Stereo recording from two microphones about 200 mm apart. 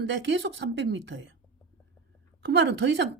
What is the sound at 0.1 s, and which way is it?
A woman's voice, 65° right (ahead or behind).